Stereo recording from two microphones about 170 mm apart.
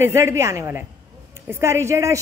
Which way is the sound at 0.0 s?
15° right (ahead or behind).